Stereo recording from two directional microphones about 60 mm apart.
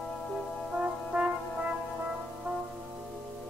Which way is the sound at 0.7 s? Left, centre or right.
Centre.